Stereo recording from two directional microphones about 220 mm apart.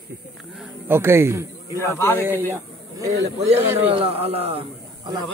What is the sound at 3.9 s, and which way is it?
Speech, 25° right (ahead or behind).